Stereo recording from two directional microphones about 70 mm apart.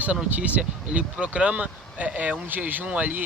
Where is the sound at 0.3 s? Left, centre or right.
Right.